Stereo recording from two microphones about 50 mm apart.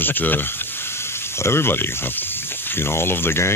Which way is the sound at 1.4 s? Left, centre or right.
Left.